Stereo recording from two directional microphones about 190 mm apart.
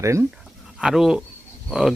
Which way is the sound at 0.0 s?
15° right (ahead or behind).